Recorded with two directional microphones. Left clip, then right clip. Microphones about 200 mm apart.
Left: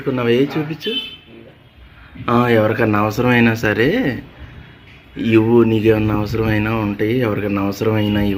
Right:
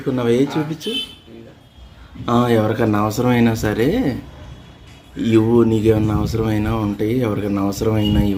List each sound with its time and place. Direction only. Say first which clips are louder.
0.0 s speech: left 1 dB; 5° right (ahead or behind)
2.2 s speech: left 2 dB; 5° right (ahead or behind)